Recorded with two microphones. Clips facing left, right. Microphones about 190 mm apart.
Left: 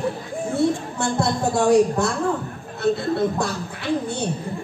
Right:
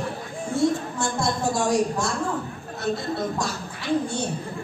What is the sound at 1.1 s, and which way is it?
Speech, 60° left (ahead or behind).